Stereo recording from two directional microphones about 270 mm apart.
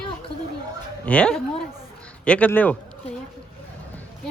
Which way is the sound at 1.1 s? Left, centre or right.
Centre.